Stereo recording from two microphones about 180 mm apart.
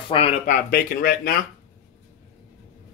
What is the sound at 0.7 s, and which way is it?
Speech, 55° left (ahead or behind).